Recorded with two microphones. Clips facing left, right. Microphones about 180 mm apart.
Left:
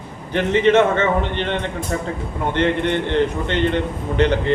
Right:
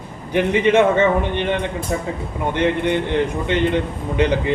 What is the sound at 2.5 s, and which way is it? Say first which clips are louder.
Speech: even; 10° right (ahead or behind).